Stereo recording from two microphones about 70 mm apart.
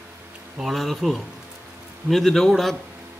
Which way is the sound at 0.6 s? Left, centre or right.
Centre.